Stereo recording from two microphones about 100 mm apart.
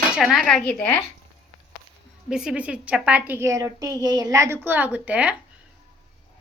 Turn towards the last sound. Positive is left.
turn(degrees=-10)  # may be behind; listen again after turning